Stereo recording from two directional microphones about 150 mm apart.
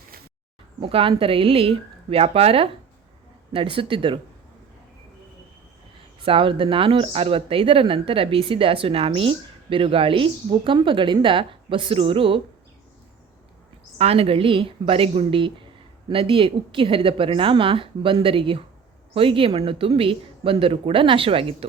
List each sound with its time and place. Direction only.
0.8 s speech: 35° right (ahead or behind)
6.2 s speech: 35° right (ahead or behind)
14.0 s speech: 40° right (ahead or behind)